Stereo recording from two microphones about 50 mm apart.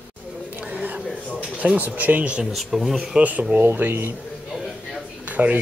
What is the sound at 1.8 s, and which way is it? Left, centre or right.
Speech, right.